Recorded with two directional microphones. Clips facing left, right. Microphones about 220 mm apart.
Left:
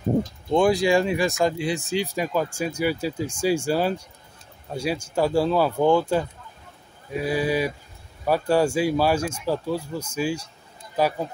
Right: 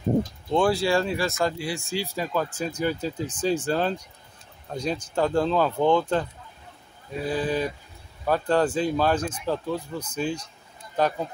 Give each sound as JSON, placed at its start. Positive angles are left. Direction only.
{"t": 0.5, "sound": "speech", "side_deg": 15}
{"t": 7.2, "sound": "speech", "side_deg": 10}